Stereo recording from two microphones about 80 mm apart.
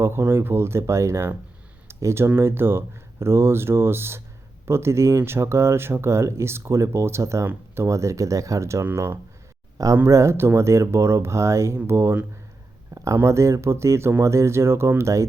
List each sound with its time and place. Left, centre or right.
0.0 s speech: right
12.9 s a sound: right
13.2 s speech: right